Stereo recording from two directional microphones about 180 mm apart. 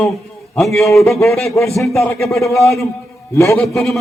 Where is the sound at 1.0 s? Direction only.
15° left (ahead or behind).